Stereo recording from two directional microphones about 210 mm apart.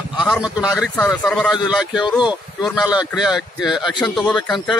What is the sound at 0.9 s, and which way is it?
Speech, 10° left (ahead or behind).